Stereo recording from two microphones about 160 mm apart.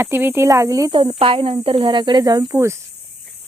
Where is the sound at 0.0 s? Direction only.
15° right (ahead or behind).